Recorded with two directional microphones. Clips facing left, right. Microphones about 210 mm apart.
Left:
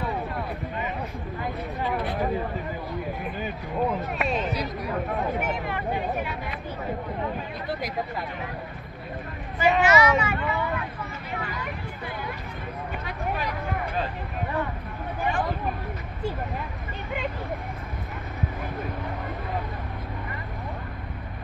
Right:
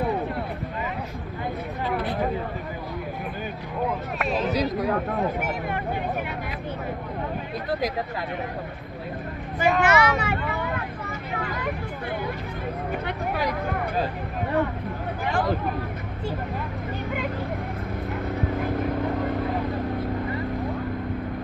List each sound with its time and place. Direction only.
4.5 s speech: 90° right
9.6 s speech: 55° right (ahead or behind)